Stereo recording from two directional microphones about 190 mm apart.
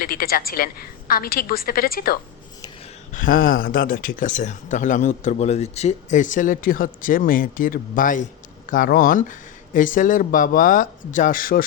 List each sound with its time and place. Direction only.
0.0 s speech: 50° left (ahead or behind)